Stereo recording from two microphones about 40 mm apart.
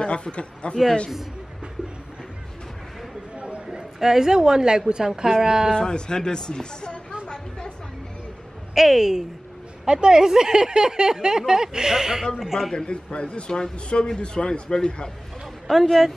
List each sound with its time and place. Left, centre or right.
0.0 s speech: left
3.3 s a sound: right
4.0 s speech: centre
5.7 s speech: centre
8.7 s speech: centre
12.7 s speech: left
15.6 s speech: centre